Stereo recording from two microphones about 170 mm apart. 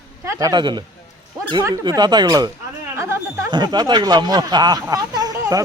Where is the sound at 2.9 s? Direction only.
15° right (ahead or behind).